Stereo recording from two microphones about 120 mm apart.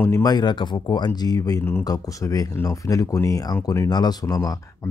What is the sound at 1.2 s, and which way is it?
Speech, 30° left (ahead or behind).